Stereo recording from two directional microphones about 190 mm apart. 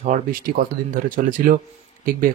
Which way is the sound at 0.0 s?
40° right (ahead or behind).